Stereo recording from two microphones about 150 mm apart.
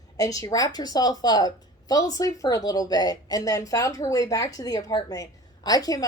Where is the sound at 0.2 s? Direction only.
25° left (ahead or behind).